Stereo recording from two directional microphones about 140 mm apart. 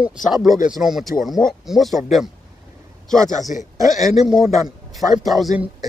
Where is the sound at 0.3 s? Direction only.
Centre (ahead or behind).